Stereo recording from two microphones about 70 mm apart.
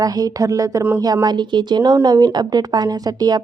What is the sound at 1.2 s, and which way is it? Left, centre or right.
Speech, right.